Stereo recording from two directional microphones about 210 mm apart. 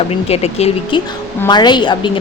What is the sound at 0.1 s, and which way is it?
A woman's voice, 30° left (ahead or behind).